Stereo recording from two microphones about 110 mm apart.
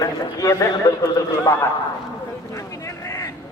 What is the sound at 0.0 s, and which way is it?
Speech, 30° left (ahead or behind).